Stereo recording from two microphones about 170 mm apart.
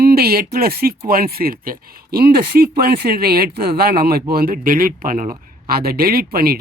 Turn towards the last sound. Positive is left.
turn(degrees=-60)  # may be behind; listen again after turning